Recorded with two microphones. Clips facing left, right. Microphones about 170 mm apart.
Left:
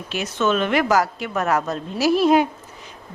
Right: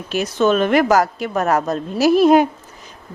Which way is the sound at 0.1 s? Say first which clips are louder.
Right 5 dB; 40° right (ahead or behind).